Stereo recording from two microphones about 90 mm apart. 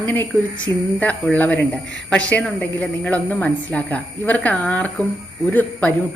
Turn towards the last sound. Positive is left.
turn(degrees=20)  # may be behind; listen again after turning